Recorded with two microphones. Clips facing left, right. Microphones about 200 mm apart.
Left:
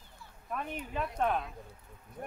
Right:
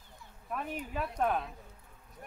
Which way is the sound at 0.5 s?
5° right (ahead or behind).